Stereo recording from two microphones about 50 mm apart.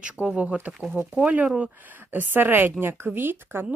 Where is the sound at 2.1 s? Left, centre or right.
Right.